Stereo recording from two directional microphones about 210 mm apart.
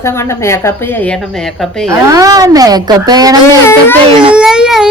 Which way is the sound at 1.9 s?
15° right (ahead or behind).